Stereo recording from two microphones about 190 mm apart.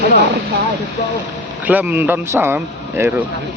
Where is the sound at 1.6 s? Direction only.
10° right (ahead or behind).